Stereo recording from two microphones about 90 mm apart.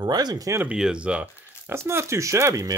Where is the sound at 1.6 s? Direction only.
30° right (ahead or behind).